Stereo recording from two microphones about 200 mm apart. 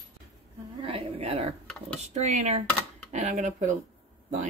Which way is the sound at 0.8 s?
30° right (ahead or behind).